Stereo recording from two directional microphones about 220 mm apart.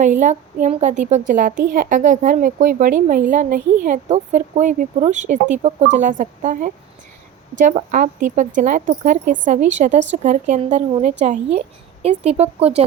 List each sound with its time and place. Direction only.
0.0 s a woman's voice: 35° right (ahead or behind)
7.9 s a woman's voice: 35° right (ahead or behind)